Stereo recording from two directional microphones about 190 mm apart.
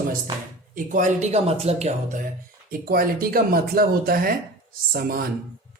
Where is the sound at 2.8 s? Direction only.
50° right (ahead or behind).